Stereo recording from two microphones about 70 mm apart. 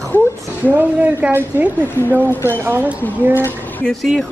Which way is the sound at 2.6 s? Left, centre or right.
Right.